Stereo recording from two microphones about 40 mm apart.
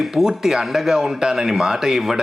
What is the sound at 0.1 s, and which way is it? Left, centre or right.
A man's voice, centre.